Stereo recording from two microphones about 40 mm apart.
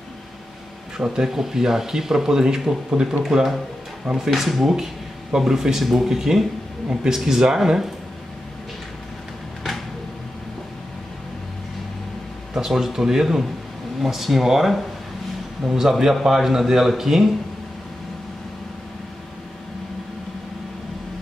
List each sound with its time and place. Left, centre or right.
0.9 s speech: centre
4.3 s speech: centre
12.5 s speech: centre